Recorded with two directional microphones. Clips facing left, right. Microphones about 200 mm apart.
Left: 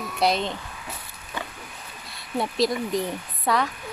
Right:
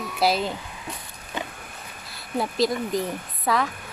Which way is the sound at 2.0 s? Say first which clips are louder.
Even; centre (ahead or behind).